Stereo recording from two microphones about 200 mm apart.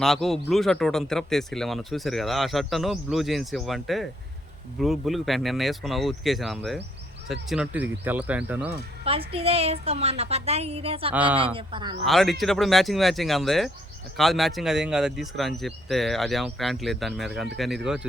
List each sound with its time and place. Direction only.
0.0 s speech: centre (ahead or behind)
9.0 s a woman's voice: 30° right (ahead or behind)
11.1 s speech: 5° right (ahead or behind)
11.5 s a woman's voice: 25° right (ahead or behind)
12.0 s speech: centre (ahead or behind)